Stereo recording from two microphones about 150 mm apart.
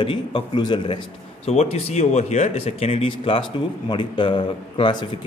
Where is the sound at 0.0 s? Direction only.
30° left (ahead or behind).